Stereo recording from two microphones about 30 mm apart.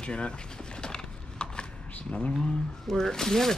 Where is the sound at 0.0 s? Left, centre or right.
Left.